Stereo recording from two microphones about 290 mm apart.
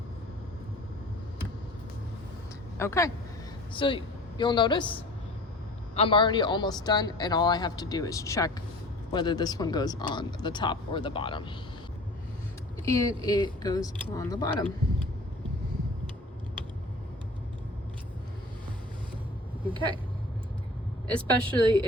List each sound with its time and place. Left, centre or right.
2.7 s a woman's voice: centre
5.9 s a man's voice: centre
12.8 s a man's voice: centre
19.6 s speech: centre
21.4 s speech: centre